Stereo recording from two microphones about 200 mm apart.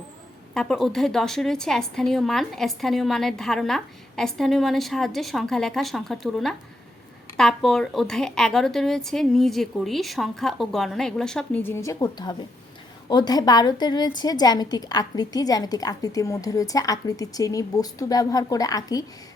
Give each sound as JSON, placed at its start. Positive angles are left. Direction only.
{"t": 0.5, "sound": "a woman's voice", "side_deg": 0}